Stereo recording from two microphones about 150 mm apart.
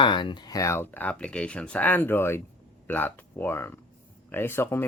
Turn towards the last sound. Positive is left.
turn(degrees=15)  # may be behind; listen again after turning